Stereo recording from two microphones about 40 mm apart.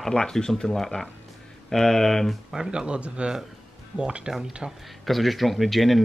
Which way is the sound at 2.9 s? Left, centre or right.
Right.